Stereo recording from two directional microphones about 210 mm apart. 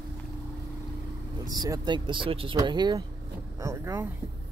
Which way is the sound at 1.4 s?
20° right (ahead or behind).